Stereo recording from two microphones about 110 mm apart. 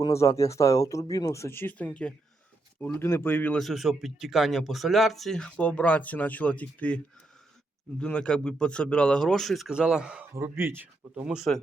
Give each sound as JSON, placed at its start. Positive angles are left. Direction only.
{"t": 0.0, "sound": "speech", "side_deg": 25}
{"t": 2.8, "sound": "speech", "side_deg": 20}
{"t": 3.6, "sound": "speech", "side_deg": 0}
{"t": 10.3, "sound": "speech", "side_deg": -25}
{"t": 11.3, "sound": "speech", "side_deg": 0}